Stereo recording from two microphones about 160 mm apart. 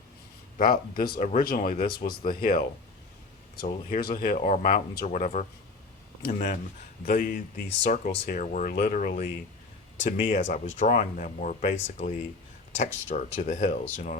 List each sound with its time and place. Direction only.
0.6 s speech: 60° left (ahead or behind)
7.0 s speech: 70° left (ahead or behind)
8.4 s speech: 50° left (ahead or behind)